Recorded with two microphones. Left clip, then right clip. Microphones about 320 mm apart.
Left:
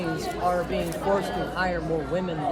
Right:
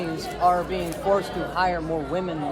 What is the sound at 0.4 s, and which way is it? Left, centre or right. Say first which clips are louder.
A man's voice: right 5 dB; centre.